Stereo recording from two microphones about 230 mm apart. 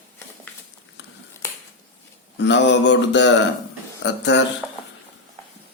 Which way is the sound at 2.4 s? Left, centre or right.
Left.